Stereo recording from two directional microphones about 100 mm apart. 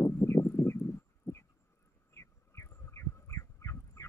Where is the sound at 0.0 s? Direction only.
25° left (ahead or behind).